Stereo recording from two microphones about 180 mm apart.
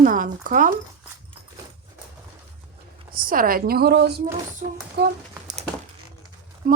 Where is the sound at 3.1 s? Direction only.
50° right (ahead or behind).